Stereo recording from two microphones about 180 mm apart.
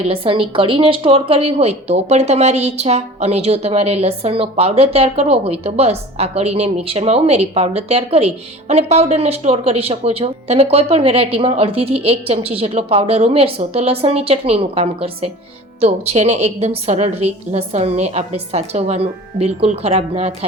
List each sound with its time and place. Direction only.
0.0 s a woman's voice: 30° right (ahead or behind)